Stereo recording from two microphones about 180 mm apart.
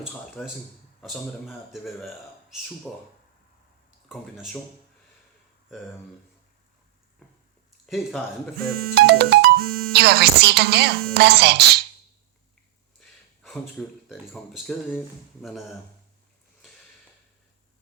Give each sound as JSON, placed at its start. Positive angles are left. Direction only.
{"t": 0.4, "sound": "a man's voice", "side_deg": 10}
{"t": 4.1, "sound": "a man's voice", "side_deg": 0}
{"t": 7.9, "sound": "a man's voice", "side_deg": 0}
{"t": 8.7, "sound": "speech", "side_deg": -60}
{"t": 13.0, "sound": "speech", "side_deg": 0}